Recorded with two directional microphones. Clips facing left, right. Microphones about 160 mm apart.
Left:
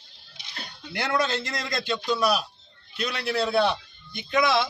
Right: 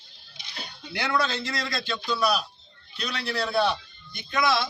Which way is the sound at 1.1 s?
20° left (ahead or behind).